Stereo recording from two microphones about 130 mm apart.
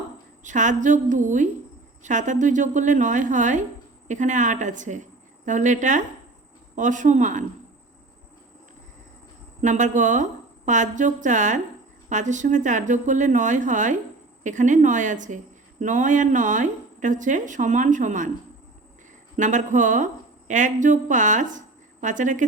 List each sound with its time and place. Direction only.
0.4 s speech: 70° right (ahead or behind)
9.6 s speech: 70° right (ahead or behind)
19.4 s speech: 70° right (ahead or behind)